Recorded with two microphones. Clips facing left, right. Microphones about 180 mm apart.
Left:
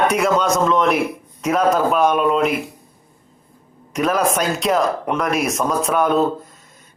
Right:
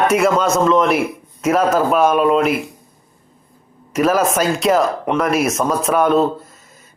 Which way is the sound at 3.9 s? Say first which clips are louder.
Right 3 dB; 5° right (ahead or behind).